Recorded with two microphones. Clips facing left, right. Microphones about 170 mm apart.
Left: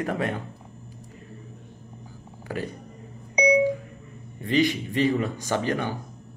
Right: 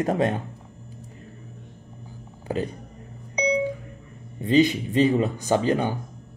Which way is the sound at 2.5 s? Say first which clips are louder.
Right 4 dB; 20° right (ahead or behind).